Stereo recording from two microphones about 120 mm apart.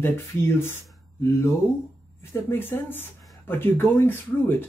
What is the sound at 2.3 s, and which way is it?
Speech, 20° left (ahead or behind).